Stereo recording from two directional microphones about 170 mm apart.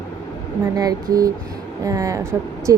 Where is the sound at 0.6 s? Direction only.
20° right (ahead or behind).